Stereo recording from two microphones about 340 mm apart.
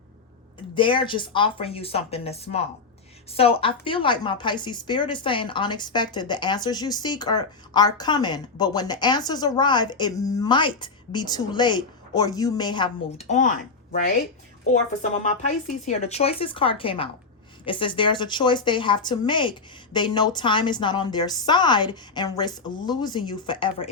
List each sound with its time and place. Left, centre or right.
0.8 s a woman's voice: centre